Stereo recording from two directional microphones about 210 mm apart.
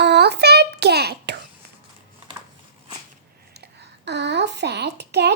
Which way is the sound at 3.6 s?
55° right (ahead or behind).